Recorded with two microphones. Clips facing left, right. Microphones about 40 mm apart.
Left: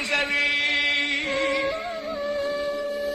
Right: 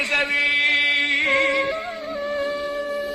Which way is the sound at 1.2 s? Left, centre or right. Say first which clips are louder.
Right 6 dB; right.